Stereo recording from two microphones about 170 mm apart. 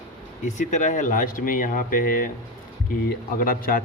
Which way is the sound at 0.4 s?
45° left (ahead or behind).